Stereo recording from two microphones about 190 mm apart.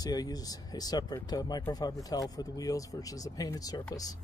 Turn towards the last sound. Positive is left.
turn(degrees=20)  # may be behind; listen again after turning